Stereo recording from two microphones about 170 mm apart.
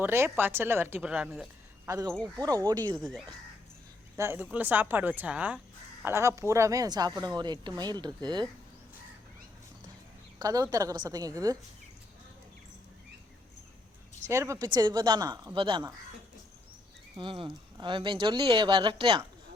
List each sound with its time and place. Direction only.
0.0 s speech: 15° right (ahead or behind)
1.9 s a woman's voice: 20° right (ahead or behind)
3.0 s speech: centre (ahead or behind)
4.2 s a woman's voice: 15° right (ahead or behind)
10.3 s a woman's voice: 20° right (ahead or behind)
14.3 s a woman's voice: 15° right (ahead or behind)
17.2 s a woman's voice: 30° right (ahead or behind)